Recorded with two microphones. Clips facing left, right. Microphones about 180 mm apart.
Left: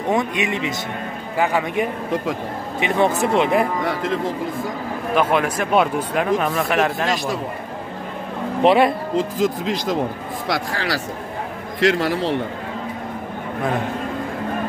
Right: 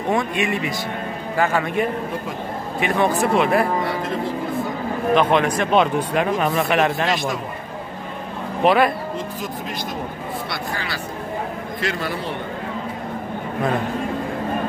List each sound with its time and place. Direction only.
0.1 s a man's voice: 20° left (ahead or behind)
5.1 s speech: 10° left (ahead or behind)
8.6 s speech: 25° left (ahead or behind)
9.1 s speech: 90° left